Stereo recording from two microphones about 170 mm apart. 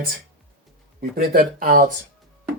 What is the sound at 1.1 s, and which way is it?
Speech, 60° right (ahead or behind).